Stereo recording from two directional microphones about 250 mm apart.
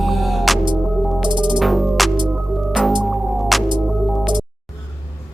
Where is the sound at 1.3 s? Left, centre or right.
Centre.